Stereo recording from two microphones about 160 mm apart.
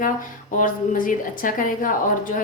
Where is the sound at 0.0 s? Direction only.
55° left (ahead or behind).